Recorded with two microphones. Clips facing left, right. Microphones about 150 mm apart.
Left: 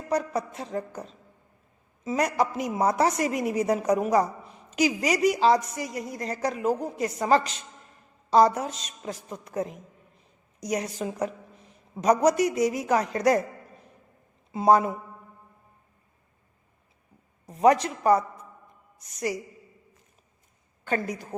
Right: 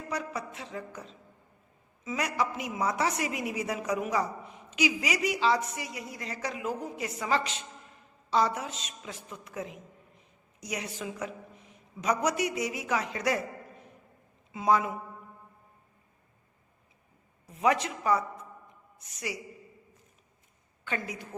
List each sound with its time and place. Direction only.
0.1 s a woman's voice: 40° left (ahead or behind)
14.5 s a woman's voice: 40° left (ahead or behind)
17.4 s a woman's voice: 40° left (ahead or behind)
20.8 s a woman's voice: 40° left (ahead or behind)